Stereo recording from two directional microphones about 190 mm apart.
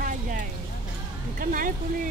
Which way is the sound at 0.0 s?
45° right (ahead or behind).